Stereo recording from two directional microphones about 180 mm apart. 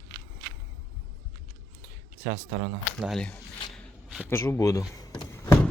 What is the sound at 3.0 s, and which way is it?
Speech, centre (ahead or behind).